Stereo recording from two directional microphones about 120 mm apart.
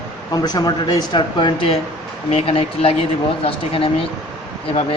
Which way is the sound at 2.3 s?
55° left (ahead or behind).